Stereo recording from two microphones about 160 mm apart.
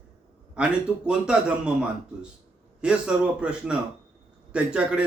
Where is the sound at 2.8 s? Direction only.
5° right (ahead or behind).